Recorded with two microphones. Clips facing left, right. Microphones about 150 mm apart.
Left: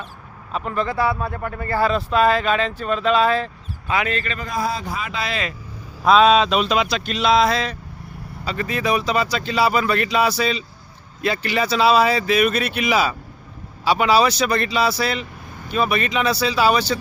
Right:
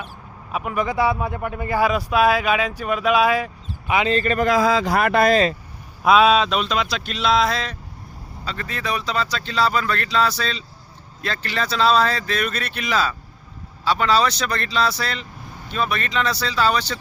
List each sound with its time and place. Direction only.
0.5 s speech: 10° right (ahead or behind)
4.1 s a man's voice: 40° right (ahead or behind)
4.4 s speech: 90° right; by 5.4 s 50° right (ahead or behind)
6.1 s speech: 5° right (ahead or behind)